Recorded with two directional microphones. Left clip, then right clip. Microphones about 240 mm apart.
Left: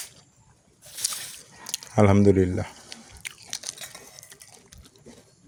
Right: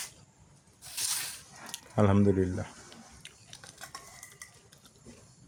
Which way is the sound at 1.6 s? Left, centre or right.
Left.